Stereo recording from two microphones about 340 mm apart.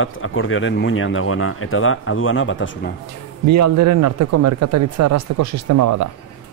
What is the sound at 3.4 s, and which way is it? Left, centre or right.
Speech, right.